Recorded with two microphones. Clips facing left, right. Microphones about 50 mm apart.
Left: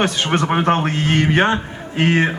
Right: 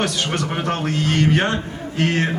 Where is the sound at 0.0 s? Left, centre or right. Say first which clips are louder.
Left 4 dB; left.